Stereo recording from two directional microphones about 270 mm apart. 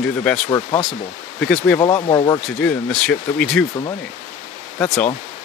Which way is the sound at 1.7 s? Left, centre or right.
Centre.